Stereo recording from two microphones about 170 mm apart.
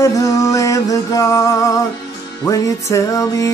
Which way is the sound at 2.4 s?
20° left (ahead or behind).